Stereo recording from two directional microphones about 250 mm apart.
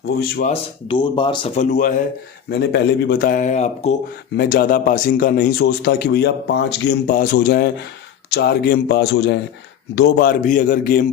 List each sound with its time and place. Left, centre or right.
0.2 s speech: left
0.5 s speech: centre
2.5 s speech: left